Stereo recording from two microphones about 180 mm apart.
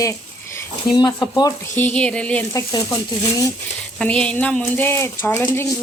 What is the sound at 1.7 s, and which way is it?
Speech, 10° left (ahead or behind).